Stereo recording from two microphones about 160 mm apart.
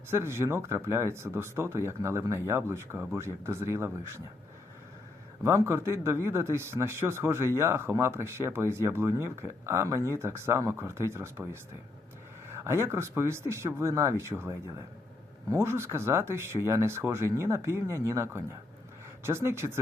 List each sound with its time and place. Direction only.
0.1 s speech: 15° right (ahead or behind)
5.4 s speech: 20° right (ahead or behind)
12.5 s speech: 15° right (ahead or behind)